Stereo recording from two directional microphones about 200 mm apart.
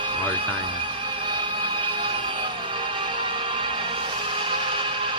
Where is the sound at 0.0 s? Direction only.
25° right (ahead or behind).